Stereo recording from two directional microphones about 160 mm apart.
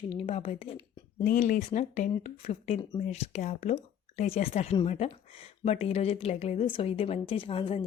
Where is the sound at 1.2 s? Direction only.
55° left (ahead or behind).